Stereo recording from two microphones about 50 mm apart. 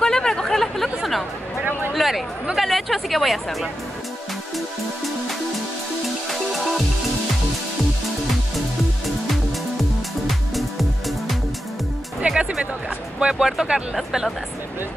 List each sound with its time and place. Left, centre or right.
0.0 s chatter: centre
1.6 s a sound: right
2.0 s chatter: centre
2.5 s speech: centre
6.5 s music: centre
10.2 s music: centre
12.2 s music: centre
13.2 s speech: centre